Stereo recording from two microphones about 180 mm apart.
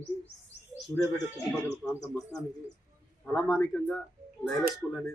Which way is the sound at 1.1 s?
20° left (ahead or behind).